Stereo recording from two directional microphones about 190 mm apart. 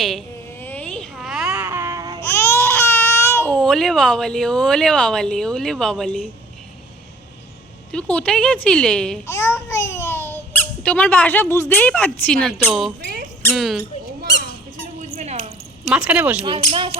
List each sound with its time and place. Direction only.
0.0 s baby cry: centre (ahead or behind); by 2.2 s 20° right (ahead or behind)
2.2 s speech: 15° left (ahead or behind)
7.9 s speech: 5° left (ahead or behind)
9.2 s a child's voice: 15° left (ahead or behind); by 13.8 s centre (ahead or behind)
14.9 s a sound: 35° right (ahead or behind)
15.9 s speech: 5° right (ahead or behind)
16.4 s speech: 25° right (ahead or behind)